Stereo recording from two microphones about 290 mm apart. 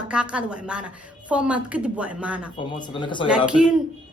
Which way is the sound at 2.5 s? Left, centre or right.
Centre.